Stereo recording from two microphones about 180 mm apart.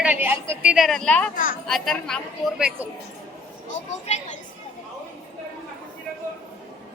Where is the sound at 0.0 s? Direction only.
10° right (ahead or behind).